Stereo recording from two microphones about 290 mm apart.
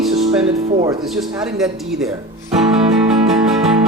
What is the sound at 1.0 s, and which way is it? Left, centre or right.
Speech, centre.